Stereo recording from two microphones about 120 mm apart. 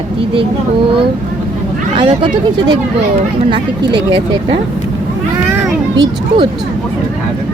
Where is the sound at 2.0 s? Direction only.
40° right (ahead or behind).